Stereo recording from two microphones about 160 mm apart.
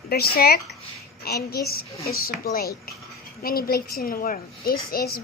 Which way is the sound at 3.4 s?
70° left (ahead or behind).